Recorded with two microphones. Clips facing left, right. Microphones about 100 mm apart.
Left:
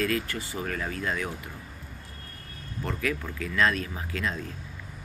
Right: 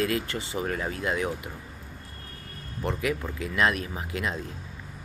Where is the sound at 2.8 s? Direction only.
20° right (ahead or behind).